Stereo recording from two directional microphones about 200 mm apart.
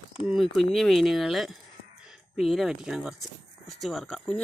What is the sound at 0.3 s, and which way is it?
Speech, centre (ahead or behind).